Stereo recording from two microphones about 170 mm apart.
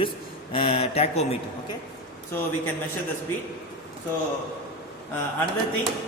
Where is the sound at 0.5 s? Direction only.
35° left (ahead or behind).